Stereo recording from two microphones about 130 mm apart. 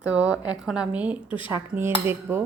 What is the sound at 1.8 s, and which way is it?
Cutlery, 20° right (ahead or behind).